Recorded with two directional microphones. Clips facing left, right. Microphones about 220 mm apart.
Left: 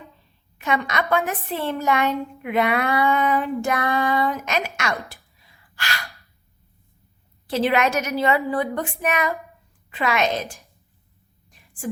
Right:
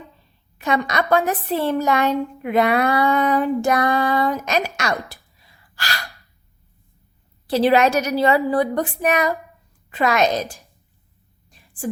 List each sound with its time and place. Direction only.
0.6 s a woman's voice: 40° right (ahead or behind)
5.7 s gasp: 35° right (ahead or behind)
7.4 s a woman's voice: 35° right (ahead or behind)
11.4 s a sound: 30° right (ahead or behind)